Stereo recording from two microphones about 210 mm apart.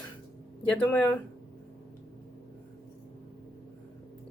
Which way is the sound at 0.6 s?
5° left (ahead or behind).